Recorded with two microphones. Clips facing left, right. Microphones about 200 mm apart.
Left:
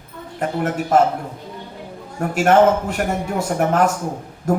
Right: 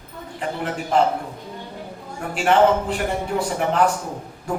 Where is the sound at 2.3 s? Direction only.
45° left (ahead or behind).